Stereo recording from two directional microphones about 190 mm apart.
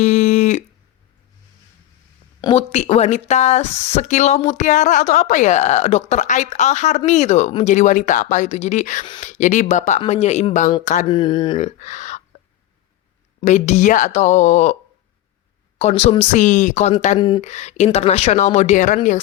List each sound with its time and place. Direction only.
0.0 s a sound: 40° left (ahead or behind)
2.4 s speech: 30° left (ahead or behind)
11.1 s speech: 25° left (ahead or behind)
11.5 s a sound: 40° left (ahead or behind)
13.4 s speech: 40° left (ahead or behind)
15.8 s speech: 35° left (ahead or behind)
17.2 s speech: 25° left (ahead or behind)
17.4 s speech: 35° left (ahead or behind)